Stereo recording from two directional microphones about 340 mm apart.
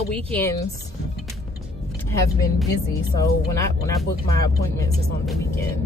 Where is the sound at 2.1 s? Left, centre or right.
Centre.